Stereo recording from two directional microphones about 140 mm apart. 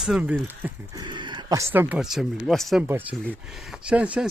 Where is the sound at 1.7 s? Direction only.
10° right (ahead or behind).